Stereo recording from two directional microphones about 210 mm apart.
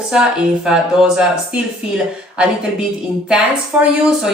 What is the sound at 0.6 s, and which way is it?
Speech, 5° right (ahead or behind).